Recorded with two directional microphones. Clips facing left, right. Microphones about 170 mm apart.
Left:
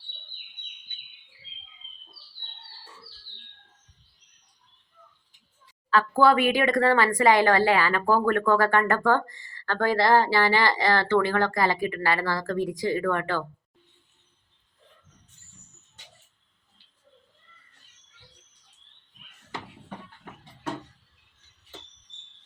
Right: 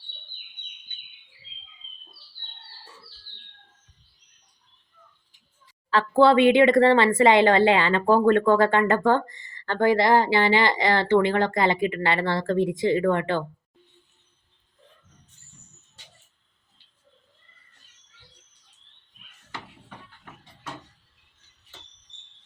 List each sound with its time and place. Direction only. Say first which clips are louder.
5.9 s speech: right 3 dB; 25° right (ahead or behind)